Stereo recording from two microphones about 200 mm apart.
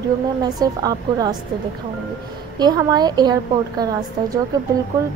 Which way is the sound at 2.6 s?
20° right (ahead or behind).